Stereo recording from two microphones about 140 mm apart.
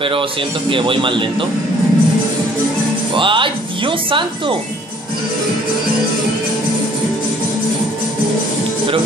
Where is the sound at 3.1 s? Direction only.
35° right (ahead or behind).